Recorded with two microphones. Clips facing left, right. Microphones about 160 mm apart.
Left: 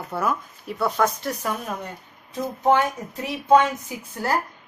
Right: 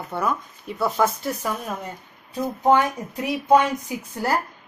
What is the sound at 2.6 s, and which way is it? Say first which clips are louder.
A woman's voice: right 1 dB; 15° right (ahead or behind).